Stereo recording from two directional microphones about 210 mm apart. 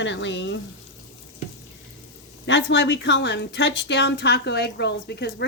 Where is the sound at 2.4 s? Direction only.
60° left (ahead or behind).